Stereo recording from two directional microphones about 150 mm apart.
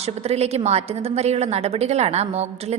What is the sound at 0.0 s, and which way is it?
A woman's voice, 45° right (ahead or behind).